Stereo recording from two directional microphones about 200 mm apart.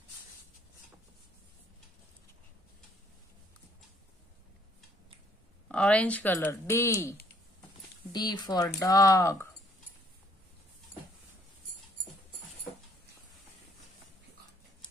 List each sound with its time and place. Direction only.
5.7 s speech: 5° left (ahead or behind)